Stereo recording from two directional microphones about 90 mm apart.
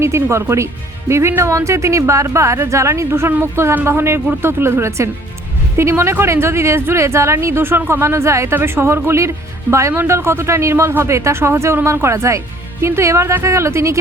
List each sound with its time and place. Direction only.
0.0 s speech: 30° right (ahead or behind)